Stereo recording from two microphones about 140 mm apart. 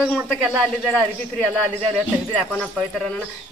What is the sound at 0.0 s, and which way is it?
Speech, centre (ahead or behind).